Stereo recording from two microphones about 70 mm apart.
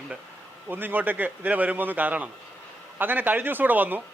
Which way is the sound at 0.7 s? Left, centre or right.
Right.